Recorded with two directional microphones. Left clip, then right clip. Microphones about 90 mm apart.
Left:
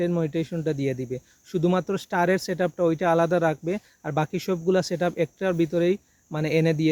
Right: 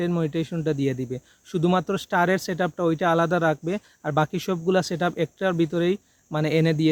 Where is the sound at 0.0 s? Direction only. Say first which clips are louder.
Even; 30° right (ahead or behind).